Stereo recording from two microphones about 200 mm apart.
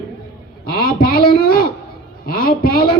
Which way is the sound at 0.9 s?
50° left (ahead or behind).